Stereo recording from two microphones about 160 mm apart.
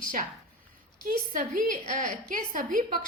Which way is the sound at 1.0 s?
60° right (ahead or behind).